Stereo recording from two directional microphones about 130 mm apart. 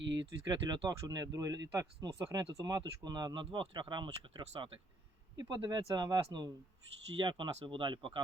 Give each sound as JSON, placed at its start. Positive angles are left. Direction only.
{"t": 0.2, "sound": "speech", "side_deg": -35}
{"t": 7.2, "sound": "speech", "side_deg": -35}